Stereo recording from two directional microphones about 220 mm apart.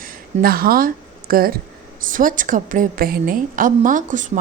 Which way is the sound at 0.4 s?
40° right (ahead or behind).